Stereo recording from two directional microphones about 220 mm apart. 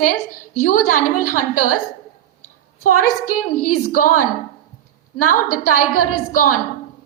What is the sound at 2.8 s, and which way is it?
A woman's voice, 90° left.